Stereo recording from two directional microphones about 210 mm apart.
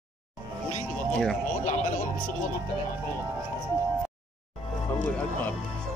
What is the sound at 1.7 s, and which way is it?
Music, 35° left (ahead or behind).